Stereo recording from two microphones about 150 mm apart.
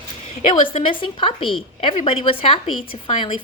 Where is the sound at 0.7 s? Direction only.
35° left (ahead or behind).